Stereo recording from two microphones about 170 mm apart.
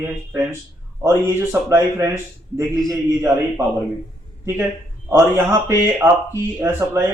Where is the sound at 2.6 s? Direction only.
20° right (ahead or behind).